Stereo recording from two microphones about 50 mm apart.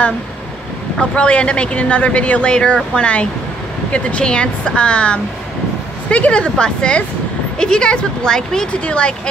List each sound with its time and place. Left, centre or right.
0.9 s speech: left